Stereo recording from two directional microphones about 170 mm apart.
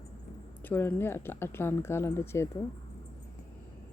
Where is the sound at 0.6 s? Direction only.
10° left (ahead or behind).